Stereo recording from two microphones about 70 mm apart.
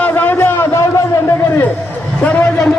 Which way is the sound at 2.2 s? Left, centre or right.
Left.